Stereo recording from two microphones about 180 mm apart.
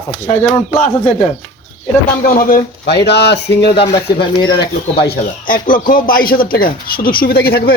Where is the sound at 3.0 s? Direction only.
70° left (ahead or behind).